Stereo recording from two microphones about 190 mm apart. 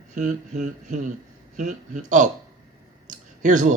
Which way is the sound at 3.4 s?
40° right (ahead or behind).